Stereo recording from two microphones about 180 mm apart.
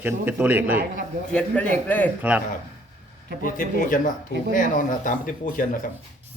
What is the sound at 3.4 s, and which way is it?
Speech, 50° left (ahead or behind).